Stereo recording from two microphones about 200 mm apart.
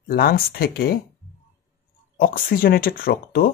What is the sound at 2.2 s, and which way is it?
Speech, 45° left (ahead or behind).